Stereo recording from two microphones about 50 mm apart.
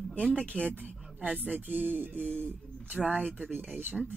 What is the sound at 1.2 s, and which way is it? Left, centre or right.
Speech, right.